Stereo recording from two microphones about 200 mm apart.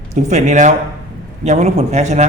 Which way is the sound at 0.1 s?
35° right (ahead or behind).